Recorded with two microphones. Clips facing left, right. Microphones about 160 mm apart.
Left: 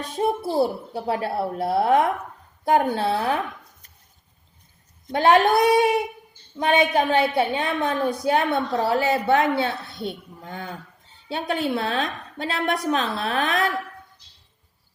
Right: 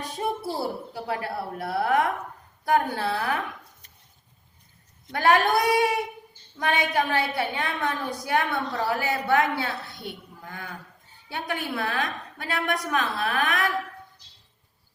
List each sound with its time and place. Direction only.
0.4 s a woman's voice: 25° left (ahead or behind)
5.1 s a woman's voice: 20° left (ahead or behind)